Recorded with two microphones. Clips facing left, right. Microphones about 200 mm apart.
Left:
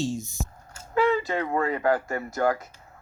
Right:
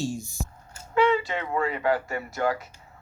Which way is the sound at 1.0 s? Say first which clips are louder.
Even; 45° left (ahead or behind).